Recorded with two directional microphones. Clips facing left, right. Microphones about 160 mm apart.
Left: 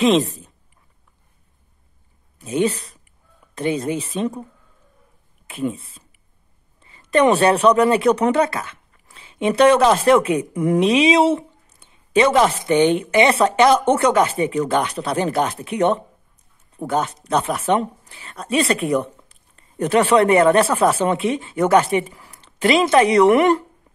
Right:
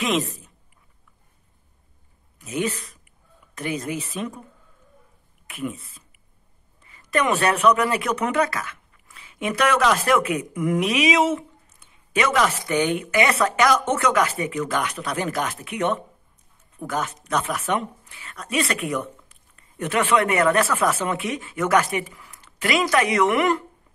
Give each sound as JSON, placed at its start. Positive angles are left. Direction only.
{"t": 0.0, "sound": "a woman's voice", "side_deg": 30}
{"t": 2.3, "sound": "speech", "side_deg": 30}
{"t": 5.5, "sound": "speech", "side_deg": 30}